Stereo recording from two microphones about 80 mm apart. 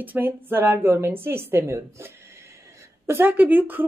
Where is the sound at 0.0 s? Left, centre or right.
Right.